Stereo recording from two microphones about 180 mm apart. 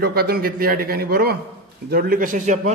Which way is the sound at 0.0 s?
60° right (ahead or behind).